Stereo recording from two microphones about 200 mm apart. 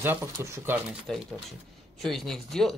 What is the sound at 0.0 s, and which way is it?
Speech, 10° right (ahead or behind).